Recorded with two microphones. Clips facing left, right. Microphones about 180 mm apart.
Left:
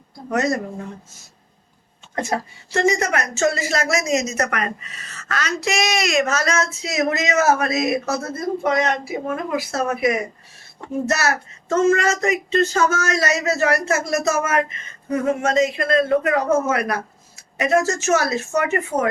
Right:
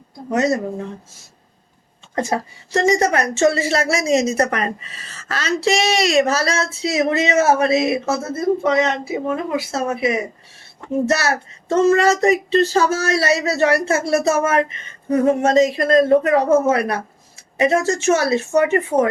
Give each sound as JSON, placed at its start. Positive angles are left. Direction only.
{"t": 0.3, "sound": "a woman's voice", "side_deg": -25}
{"t": 2.1, "sound": "a woman's voice", "side_deg": -30}